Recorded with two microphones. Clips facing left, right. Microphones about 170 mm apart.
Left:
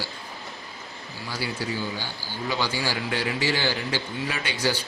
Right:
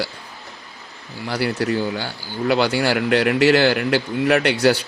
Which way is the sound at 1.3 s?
65° right (ahead or behind).